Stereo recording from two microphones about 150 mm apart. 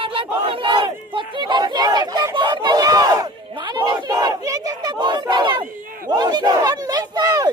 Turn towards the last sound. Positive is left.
turn(degrees=-25)  # may be behind; listen again after turning